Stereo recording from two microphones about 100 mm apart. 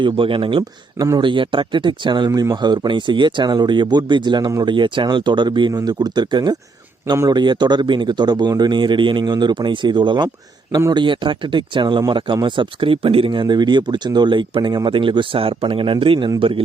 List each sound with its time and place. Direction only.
0.0 s speech: 60° right (ahead or behind)
13.4 s speech: 45° right (ahead or behind)